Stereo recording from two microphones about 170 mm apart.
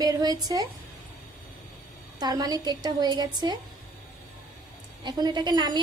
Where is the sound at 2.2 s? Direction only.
20° right (ahead or behind).